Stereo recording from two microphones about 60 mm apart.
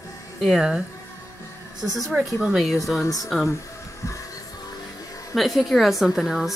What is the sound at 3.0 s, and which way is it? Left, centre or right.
Speech, left.